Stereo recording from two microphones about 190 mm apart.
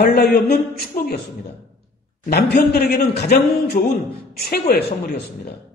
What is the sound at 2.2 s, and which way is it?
A man's voice, 60° left (ahead or behind).